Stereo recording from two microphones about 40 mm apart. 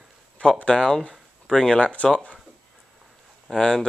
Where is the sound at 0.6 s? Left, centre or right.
Centre.